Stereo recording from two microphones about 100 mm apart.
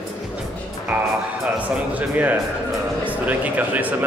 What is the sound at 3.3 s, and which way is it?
Speech, 15° right (ahead or behind).